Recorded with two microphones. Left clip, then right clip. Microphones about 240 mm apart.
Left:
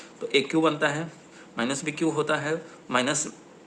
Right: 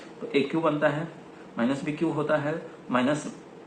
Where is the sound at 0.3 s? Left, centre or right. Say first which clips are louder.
Left 2 dB; left.